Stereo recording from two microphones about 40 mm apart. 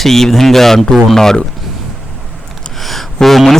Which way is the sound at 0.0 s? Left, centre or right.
Centre.